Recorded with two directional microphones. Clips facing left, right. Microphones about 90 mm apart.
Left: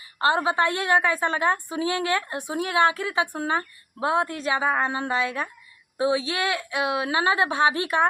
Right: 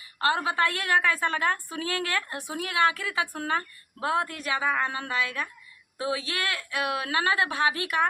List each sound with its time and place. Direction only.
0.2 s a woman's voice: 25° left (ahead or behind)